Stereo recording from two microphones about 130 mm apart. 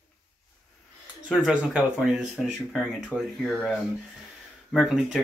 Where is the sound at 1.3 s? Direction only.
5° right (ahead or behind).